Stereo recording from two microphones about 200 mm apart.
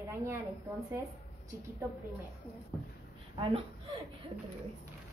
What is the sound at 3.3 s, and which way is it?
Speech, 25° right (ahead or behind).